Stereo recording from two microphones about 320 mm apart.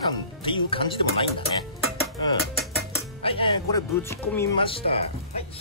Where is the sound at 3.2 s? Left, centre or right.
Centre.